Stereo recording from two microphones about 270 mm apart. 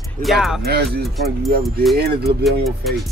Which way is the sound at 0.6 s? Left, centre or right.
Right.